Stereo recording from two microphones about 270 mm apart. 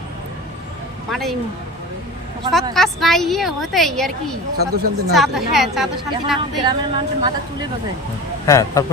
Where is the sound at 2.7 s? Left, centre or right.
Centre.